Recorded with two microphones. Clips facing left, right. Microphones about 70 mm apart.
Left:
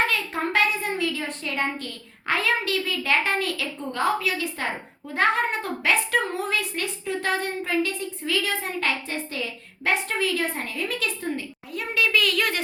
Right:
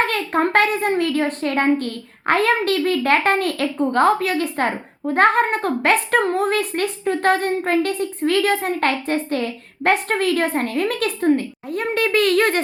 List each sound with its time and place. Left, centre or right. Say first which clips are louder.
0.0 s a child's voice: right 6 dB; right